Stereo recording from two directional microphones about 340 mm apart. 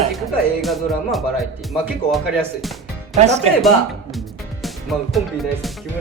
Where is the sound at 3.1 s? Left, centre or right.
Centre.